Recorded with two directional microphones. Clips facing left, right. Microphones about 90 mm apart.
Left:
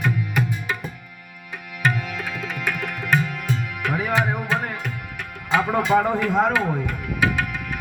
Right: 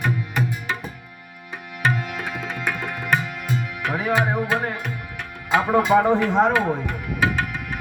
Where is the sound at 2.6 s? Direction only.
15° right (ahead or behind).